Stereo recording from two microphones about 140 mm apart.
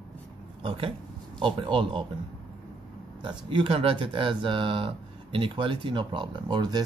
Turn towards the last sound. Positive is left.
turn(degrees=-30)  # may be behind; listen again after turning